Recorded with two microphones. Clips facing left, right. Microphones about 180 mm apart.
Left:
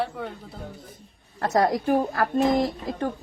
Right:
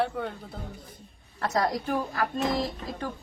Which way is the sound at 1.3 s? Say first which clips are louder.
Left 5 dB; 50° left (ahead or behind).